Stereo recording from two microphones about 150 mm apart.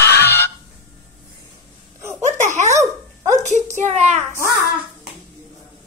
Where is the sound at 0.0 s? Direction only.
90° left.